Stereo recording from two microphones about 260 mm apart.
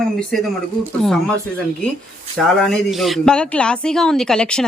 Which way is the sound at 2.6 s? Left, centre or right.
Centre.